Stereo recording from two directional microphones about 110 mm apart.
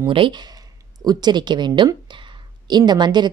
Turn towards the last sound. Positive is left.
turn(degrees=-40)  # may be behind; listen again after turning